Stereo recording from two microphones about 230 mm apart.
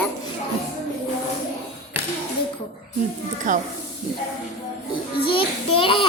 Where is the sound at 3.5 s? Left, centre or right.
Right.